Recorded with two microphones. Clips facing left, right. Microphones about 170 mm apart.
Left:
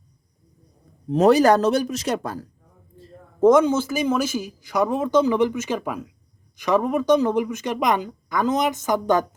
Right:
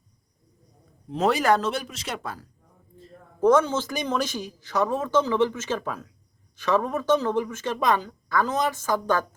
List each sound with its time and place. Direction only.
1.1 s speech: 40° left (ahead or behind)
3.4 s speech: 15° left (ahead or behind)